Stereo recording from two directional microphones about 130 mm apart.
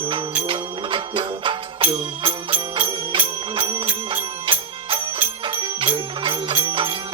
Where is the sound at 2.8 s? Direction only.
40° right (ahead or behind).